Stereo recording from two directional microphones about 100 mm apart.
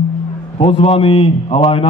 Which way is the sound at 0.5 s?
75° left (ahead or behind).